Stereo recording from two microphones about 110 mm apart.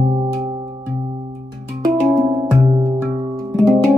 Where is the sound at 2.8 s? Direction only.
35° right (ahead or behind).